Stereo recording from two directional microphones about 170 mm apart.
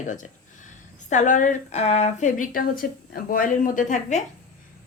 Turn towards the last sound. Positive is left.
turn(degrees=45)  # may be behind; listen again after turning